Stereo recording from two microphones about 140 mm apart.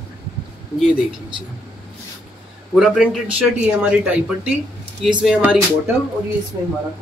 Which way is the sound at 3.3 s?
10° right (ahead or behind).